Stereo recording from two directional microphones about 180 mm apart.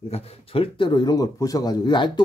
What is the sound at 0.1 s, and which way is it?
Speech, 35° left (ahead or behind).